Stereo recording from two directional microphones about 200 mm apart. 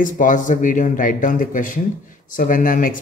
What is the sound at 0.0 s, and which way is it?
Speech, 40° left (ahead or behind).